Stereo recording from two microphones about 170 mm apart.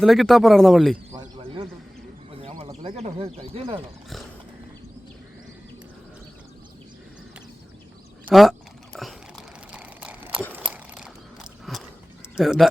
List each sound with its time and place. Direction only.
0.0 s speech: centre (ahead or behind)
1.4 s a sound: 30° right (ahead or behind)
2.8 s speech: 40° right (ahead or behind)
8.3 s a sound: centre (ahead or behind)
11.7 s mechanisms: centre (ahead or behind)
12.4 s speech: centre (ahead or behind)